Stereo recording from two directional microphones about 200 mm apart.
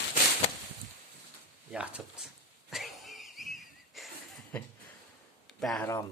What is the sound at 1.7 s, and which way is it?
Speech, 5° right (ahead or behind).